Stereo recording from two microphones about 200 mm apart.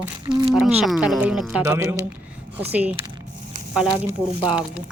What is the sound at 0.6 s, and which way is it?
Speech, centre (ahead or behind).